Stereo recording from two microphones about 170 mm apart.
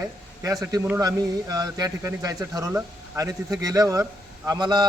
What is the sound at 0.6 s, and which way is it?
A man's voice, 15° right (ahead or behind).